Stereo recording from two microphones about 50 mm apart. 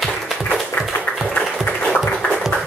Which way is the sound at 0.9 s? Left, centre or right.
Left.